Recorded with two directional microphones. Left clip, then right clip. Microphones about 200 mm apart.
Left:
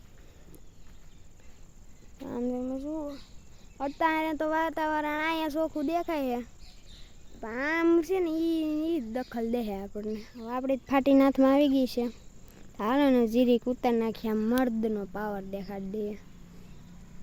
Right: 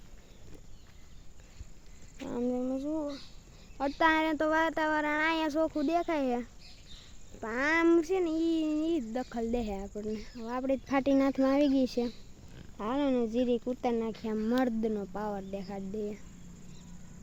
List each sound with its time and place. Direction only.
2.2 s a sound: 5° left (ahead or behind)
3.8 s speech: centre (ahead or behind)
12.7 s speech: 30° left (ahead or behind)